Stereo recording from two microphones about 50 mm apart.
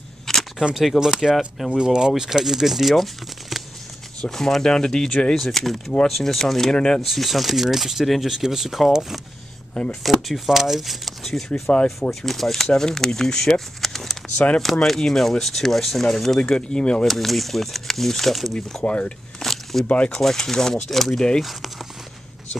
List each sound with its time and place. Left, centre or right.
0.3 s camera: centre
0.9 s speech: centre
5.3 s speech: centre
11.7 s speech: left
12.1 s speech: centre
16.4 s speech: centre
17.1 s speech: centre
18.9 s speech: left
19.4 s a sound: centre
20.1 s speech: centre
21.4 s speech: centre